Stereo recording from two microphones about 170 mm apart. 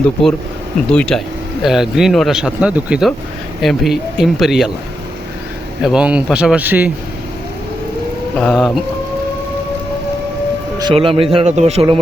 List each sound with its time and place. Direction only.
0.9 s speech: 5° left (ahead or behind)
5.8 s speech: 5° right (ahead or behind)
8.4 s speech: 5° left (ahead or behind)
10.8 s a man's voice: 30° right (ahead or behind)